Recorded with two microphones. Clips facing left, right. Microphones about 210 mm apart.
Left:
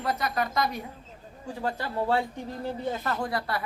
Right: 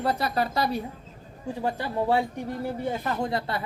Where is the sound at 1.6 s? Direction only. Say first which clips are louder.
Right 2 dB; 15° right (ahead or behind).